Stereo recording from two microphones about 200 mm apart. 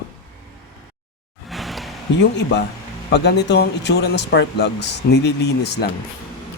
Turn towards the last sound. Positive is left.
turn(degrees=55)  # may be behind; listen again after turning